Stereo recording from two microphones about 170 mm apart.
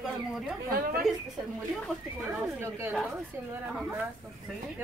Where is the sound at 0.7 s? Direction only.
60° right (ahead or behind).